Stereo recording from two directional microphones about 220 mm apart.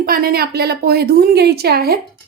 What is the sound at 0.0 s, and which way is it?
Speech, 45° right (ahead or behind).